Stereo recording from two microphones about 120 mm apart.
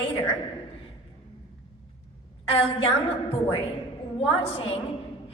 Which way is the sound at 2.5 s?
55° left (ahead or behind).